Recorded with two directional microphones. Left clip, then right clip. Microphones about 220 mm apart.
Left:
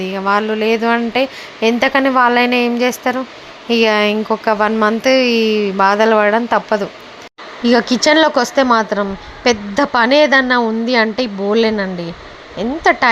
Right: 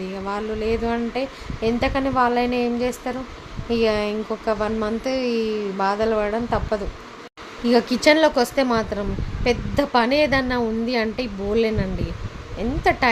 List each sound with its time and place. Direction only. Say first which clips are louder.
0.0 s a woman's voice: left 12 dB; 15° left (ahead or behind)